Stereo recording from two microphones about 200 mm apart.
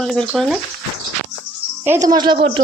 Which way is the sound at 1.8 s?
15° right (ahead or behind).